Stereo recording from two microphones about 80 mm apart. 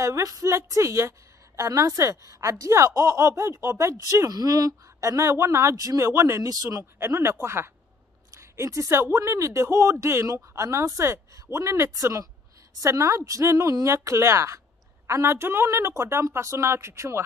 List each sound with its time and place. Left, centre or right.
0.0 s speech: right
6.8 s speech: right